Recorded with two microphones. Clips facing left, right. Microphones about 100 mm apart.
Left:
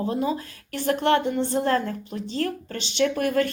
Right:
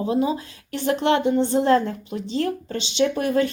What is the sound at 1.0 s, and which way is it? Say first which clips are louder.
Speech: even; 45° left (ahead or behind).